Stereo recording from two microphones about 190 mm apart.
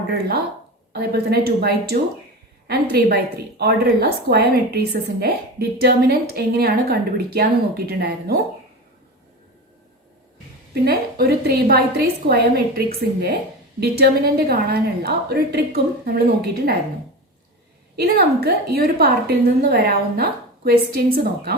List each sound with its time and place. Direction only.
0.1 s a woman's voice: 55° right (ahead or behind)
10.8 s a woman's voice: 55° right (ahead or behind)
17.9 s a woman's voice: 55° right (ahead or behind)